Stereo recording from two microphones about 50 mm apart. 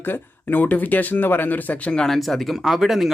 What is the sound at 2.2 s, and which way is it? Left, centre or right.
Speech, centre.